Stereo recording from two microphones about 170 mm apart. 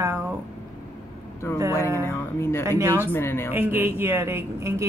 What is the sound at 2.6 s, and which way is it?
Speech, 20° right (ahead or behind).